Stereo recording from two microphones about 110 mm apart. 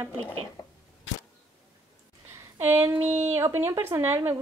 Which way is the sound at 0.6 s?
45° left (ahead or behind).